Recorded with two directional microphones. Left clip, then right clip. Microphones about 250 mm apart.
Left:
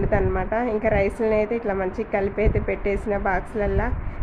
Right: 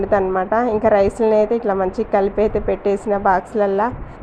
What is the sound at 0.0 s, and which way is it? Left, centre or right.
A woman's voice, centre.